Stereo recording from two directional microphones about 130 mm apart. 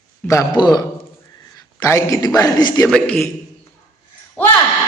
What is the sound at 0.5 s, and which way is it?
A man's voice, 35° left (ahead or behind).